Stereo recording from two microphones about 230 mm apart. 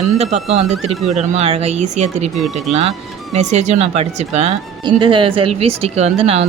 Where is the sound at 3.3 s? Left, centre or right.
Right.